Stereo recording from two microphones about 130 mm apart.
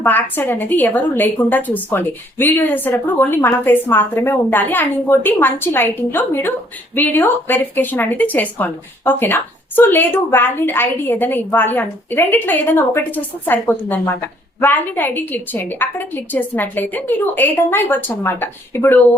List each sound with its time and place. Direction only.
0.0 s speech: 15° left (ahead or behind)